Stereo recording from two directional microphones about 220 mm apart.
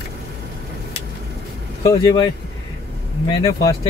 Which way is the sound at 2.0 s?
15° left (ahead or behind).